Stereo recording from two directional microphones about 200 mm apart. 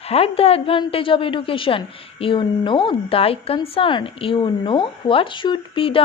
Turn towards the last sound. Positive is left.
turn(degrees=25)  # may be behind; listen again after turning